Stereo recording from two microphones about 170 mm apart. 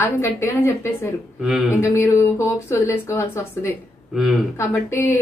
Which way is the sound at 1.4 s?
Centre (ahead or behind).